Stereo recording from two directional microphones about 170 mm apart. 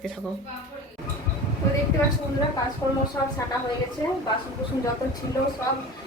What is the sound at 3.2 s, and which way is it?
Speech, 20° left (ahead or behind).